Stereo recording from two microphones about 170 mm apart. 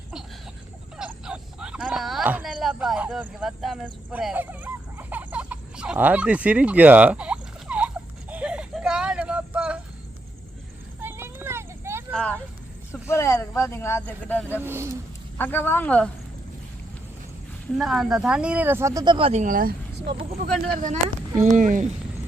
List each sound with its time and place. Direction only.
0.9 s a sound: 5° right (ahead or behind)
11.0 s a sound: 15° right (ahead or behind)
12.1 s vehicle: 5° left (ahead or behind)
12.9 s speech: 15° left (ahead or behind)
14.6 s speech: 15° right (ahead or behind)
15.4 s speech: 10° left (ahead or behind)
17.7 s speech: centre (ahead or behind); by 19.1 s 20° right (ahead or behind)
19.1 s speech: 35° right (ahead or behind)